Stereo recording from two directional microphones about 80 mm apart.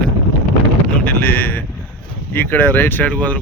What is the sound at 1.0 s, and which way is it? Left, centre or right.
Speech, left.